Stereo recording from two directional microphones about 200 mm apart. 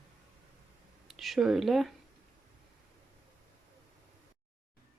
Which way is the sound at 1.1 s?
Centre (ahead or behind).